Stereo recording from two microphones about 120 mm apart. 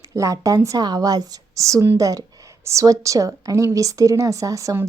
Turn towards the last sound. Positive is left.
turn(degrees=-25)  # may be behind; listen again after turning